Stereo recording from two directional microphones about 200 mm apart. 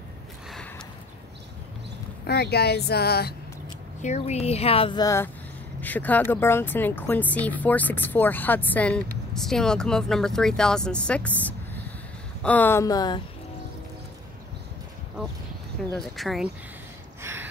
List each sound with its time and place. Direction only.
2.2 s speech: 55° left (ahead or behind)
4.0 s speech: 35° left (ahead or behind)
15.9 s speech: centre (ahead or behind)
17.2 s a sound: 10° right (ahead or behind)